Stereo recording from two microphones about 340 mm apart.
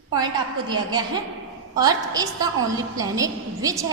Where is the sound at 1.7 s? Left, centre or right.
Centre.